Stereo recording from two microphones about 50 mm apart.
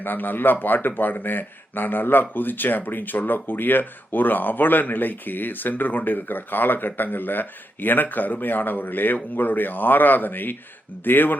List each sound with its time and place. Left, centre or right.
0.0 s a man's voice: left